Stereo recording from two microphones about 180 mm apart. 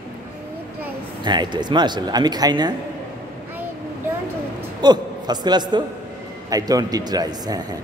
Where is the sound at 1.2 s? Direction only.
25° right (ahead or behind).